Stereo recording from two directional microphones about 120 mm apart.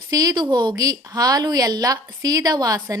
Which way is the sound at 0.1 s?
30° right (ahead or behind).